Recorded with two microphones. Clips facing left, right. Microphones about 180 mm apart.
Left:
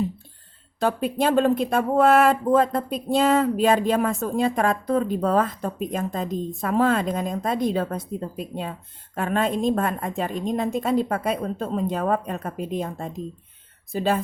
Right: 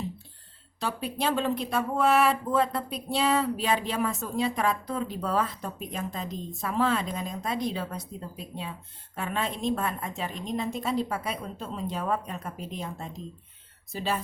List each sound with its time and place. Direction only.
0.8 s speech: 50° left (ahead or behind)
9.1 s speech: 50° left (ahead or behind)